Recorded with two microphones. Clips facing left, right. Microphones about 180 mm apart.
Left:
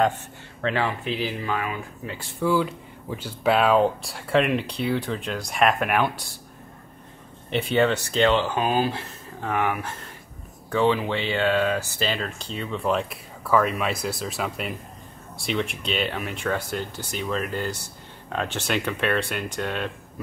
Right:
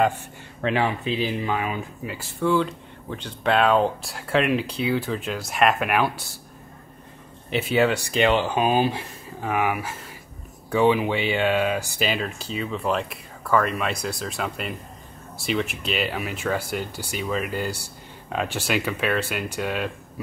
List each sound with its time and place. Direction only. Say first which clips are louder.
0.0 s speech: right 1 dB; 10° right (ahead or behind)
2.0 s speech: right 1 dB; centre (ahead or behind)
7.4 s speech: even; 5° right (ahead or behind)